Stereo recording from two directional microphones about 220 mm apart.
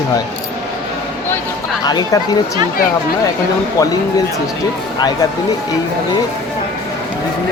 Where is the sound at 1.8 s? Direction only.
20° left (ahead or behind).